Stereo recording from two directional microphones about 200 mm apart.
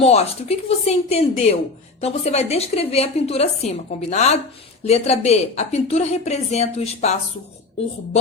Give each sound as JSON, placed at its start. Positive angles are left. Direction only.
{"t": 0.0, "sound": "speech", "side_deg": 30}